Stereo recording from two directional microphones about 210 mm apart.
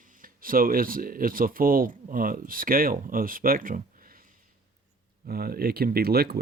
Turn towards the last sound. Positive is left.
turn(degrees=-45)  # may be behind; listen again after turning